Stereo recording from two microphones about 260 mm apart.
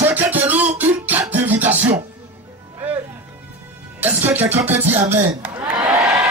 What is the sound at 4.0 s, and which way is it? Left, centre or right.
Music, centre.